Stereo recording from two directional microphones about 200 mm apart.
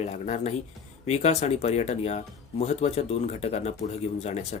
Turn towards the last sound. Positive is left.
turn(degrees=35)  # may be behind; listen again after turning